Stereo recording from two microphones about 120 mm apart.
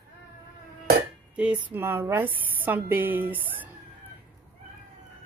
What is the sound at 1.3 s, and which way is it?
A woman's voice, 10° right (ahead or behind).